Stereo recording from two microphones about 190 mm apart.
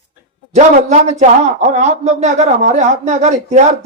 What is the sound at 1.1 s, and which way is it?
Speech, 35° right (ahead or behind).